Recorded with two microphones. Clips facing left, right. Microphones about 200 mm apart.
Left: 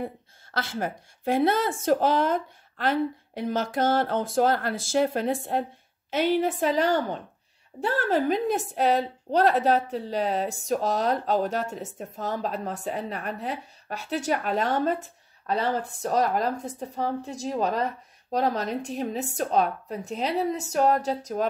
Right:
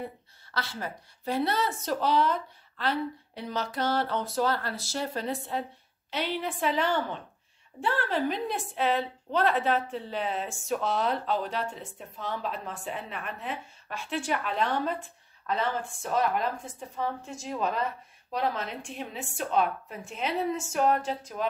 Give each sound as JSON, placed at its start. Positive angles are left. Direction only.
{"t": 0.0, "sound": "a woman's voice", "side_deg": 50}